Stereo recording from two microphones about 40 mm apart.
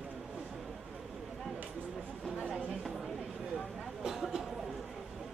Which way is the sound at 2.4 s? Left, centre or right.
Centre.